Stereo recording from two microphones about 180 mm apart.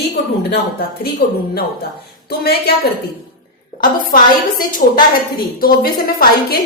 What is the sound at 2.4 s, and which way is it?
Speech, 60° left (ahead or behind).